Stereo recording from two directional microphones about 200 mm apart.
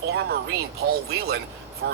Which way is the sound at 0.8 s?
50° right (ahead or behind).